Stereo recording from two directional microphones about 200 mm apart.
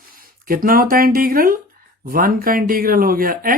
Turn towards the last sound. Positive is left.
turn(degrees=-45)  # may be behind; listen again after turning